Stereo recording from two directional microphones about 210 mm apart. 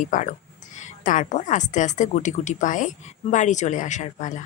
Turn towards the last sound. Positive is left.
turn(degrees=35)  # may be behind; listen again after turning